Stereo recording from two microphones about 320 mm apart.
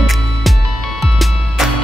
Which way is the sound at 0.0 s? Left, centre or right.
Centre.